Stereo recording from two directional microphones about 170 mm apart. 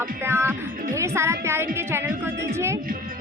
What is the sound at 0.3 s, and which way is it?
Music, 15° right (ahead or behind).